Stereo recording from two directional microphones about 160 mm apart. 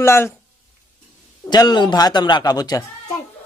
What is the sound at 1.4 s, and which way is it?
Speech, 25° left (ahead or behind).